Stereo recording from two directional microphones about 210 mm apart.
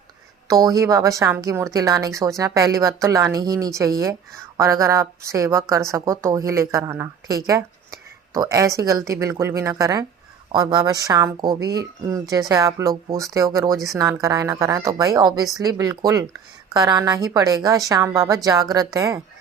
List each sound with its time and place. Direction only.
0.4 s a woman's voice: 15° right (ahead or behind)